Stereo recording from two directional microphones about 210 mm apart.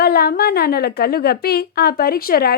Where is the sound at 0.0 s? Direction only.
50° left (ahead or behind).